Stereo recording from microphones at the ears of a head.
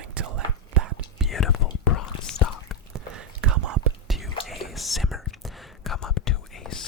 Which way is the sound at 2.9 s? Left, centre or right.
Right.